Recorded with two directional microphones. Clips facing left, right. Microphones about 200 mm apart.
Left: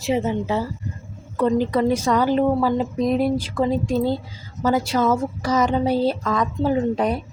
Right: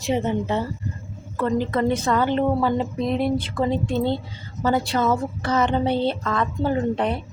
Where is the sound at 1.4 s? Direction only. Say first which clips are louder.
Left 3 dB; 15° left (ahead or behind).